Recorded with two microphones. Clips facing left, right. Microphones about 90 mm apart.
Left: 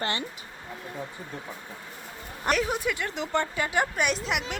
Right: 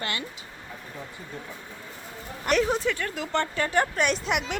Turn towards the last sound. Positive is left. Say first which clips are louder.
# right 2 dB
turn(degrees=0)  # may be behind; listen again after turning